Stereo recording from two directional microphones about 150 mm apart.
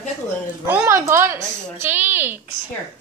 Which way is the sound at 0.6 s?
15° right (ahead or behind).